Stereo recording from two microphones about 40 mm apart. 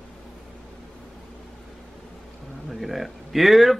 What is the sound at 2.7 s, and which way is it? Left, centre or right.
Speech, centre.